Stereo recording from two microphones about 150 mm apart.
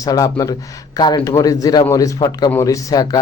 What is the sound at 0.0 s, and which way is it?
A man's voice, 25° left (ahead or behind).